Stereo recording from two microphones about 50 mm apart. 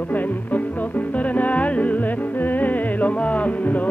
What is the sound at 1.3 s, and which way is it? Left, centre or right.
Music, left.